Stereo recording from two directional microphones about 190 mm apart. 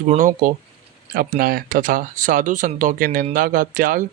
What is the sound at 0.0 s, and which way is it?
Speech, 40° right (ahead or behind).